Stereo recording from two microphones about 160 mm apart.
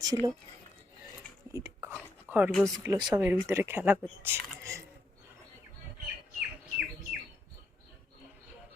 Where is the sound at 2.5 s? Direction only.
Centre (ahead or behind).